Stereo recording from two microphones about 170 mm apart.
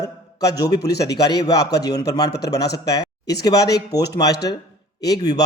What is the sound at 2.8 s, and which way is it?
Speech, 20° left (ahead or behind).